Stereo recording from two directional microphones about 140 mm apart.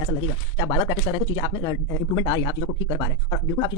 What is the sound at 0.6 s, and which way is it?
Speech, 35° left (ahead or behind).